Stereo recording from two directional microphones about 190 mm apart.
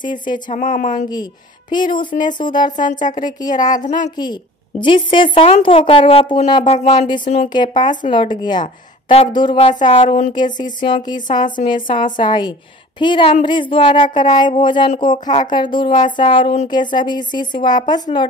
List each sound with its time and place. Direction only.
0.0 s a woman's voice: 25° left (ahead or behind)
0.6 s speech: 45° left (ahead or behind)
1.0 s a woman's voice: 20° left (ahead or behind)
2.7 s speech: 40° left (ahead or behind)
3.3 s a woman's voice: 20° left (ahead or behind)
3.5 s speech: 40° left (ahead or behind)
4.2 s a woman's voice: 25° left (ahead or behind)
10.6 s a woman's voice: 25° left (ahead or behind)
11.2 s speech: 45° left (ahead or behind)
12.0 s a woman's voice: 25° left (ahead or behind)